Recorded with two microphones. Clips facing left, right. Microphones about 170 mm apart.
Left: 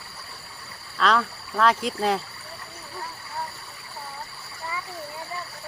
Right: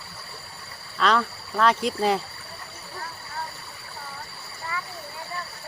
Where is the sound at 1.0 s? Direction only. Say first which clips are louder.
Even; centre (ahead or behind).